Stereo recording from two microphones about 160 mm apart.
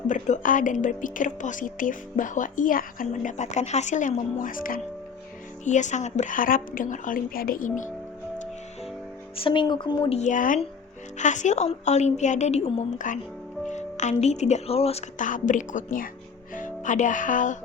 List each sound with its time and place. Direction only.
0.1 s a woman's voice: 55° left (ahead or behind)
5.6 s a woman's voice: 50° left (ahead or behind)
9.3 s speech: 35° left (ahead or behind)
10.2 s a woman's voice: 55° left (ahead or behind)
15.2 s a woman's voice: 55° left (ahead or behind)